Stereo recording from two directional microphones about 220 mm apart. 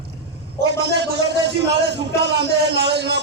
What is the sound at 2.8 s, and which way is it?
Speech, 50° right (ahead or behind).